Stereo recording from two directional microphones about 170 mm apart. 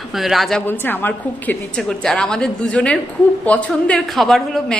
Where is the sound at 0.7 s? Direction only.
10° left (ahead or behind).